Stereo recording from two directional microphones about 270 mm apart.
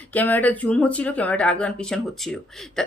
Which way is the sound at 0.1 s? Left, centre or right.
Centre.